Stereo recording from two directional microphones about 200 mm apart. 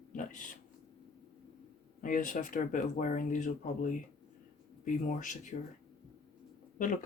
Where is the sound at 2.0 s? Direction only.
40° left (ahead or behind).